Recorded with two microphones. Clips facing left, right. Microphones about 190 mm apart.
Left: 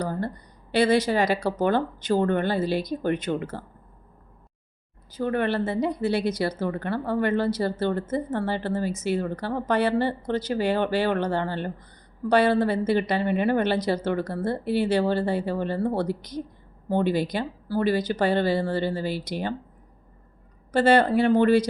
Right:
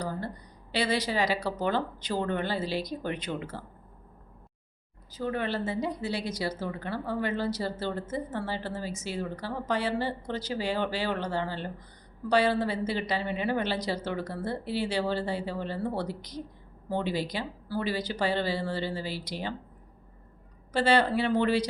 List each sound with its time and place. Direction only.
0.0 s a woman's voice: 55° left (ahead or behind)
5.1 s speech: 60° left (ahead or behind)
20.7 s speech: 50° left (ahead or behind)